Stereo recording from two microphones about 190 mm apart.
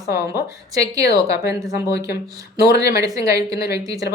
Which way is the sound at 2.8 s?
20° right (ahead or behind).